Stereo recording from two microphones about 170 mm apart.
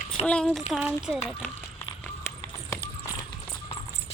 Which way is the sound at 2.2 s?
20° left (ahead or behind).